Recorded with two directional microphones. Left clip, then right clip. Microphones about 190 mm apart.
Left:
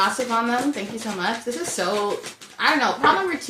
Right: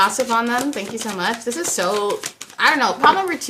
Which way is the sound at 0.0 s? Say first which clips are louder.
Right 4 dB; 25° right (ahead or behind).